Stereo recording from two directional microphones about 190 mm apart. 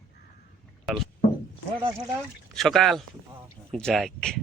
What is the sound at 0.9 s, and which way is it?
Speech, centre (ahead or behind).